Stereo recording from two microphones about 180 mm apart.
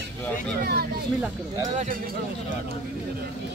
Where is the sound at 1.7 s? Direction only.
40° right (ahead or behind).